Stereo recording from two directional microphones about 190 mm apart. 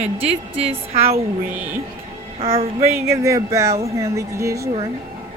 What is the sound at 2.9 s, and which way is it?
A woman's voice, 15° right (ahead or behind).